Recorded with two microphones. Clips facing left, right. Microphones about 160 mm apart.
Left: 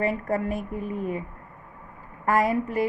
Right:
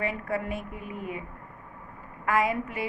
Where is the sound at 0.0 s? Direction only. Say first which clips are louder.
Left 5 dB; 40° left (ahead or behind).